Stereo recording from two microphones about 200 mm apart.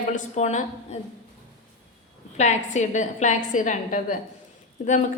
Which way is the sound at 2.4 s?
35° left (ahead or behind).